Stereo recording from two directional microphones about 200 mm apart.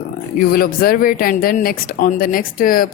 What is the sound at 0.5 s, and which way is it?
A woman's voice, 45° left (ahead or behind).